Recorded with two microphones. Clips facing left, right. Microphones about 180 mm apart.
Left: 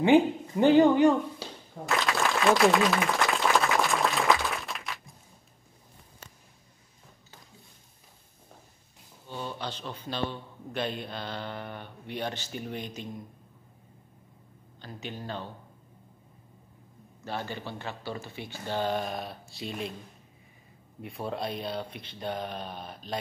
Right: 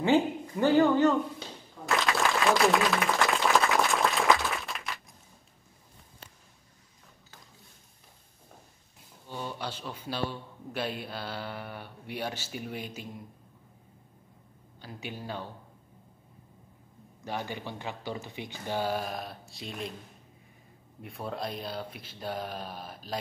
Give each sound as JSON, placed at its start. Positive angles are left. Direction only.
{"t": 0.0, "sound": "speech", "side_deg": 20}
{"t": 2.0, "sound": "applause", "side_deg": 0}
{"t": 9.3, "sound": "a man's voice", "side_deg": -10}
{"t": 14.8, "sound": "a man's voice", "side_deg": -10}
{"t": 17.2, "sound": "a man's voice", "side_deg": -15}
{"t": 21.0, "sound": "speech", "side_deg": 0}